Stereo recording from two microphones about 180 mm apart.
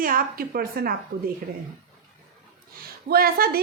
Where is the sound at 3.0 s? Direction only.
55° right (ahead or behind).